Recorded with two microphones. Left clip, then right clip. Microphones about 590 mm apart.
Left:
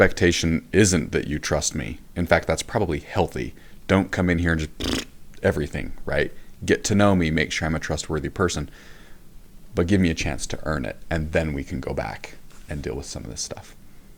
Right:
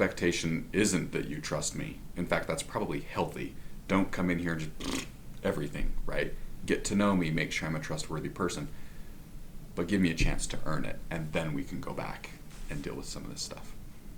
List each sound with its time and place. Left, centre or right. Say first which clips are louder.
0.0 s speech: left 11 dB; left
9.7 s speech: left 8 dB; left